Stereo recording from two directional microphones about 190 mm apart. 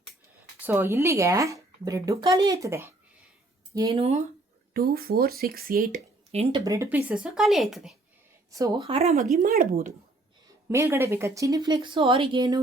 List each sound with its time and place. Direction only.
0.6 s speech: 10° right (ahead or behind)
3.9 s speech: 30° right (ahead or behind)
4.7 s speech: 50° right (ahead or behind)
6.3 s speech: 30° right (ahead or behind)
6.7 s speech: 10° right (ahead or behind)
8.4 s speech: 15° right (ahead or behind)
8.9 s speech: 35° right (ahead or behind)
9.4 s speech: 50° right (ahead or behind)
10.7 s speech: 15° right (ahead or behind)